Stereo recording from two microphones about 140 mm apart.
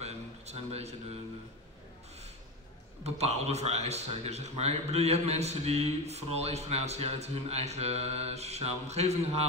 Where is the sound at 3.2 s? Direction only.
50° right (ahead or behind).